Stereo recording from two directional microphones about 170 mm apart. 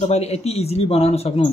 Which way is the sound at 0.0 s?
40° left (ahead or behind).